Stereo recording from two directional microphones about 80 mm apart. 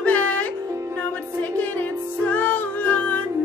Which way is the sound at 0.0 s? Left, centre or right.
Centre.